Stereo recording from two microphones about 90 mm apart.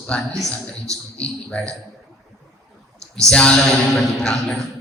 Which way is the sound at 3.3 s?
10° left (ahead or behind).